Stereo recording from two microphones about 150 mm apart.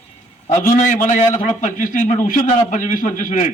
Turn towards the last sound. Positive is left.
turn(degrees=55)  # may be behind; listen again after turning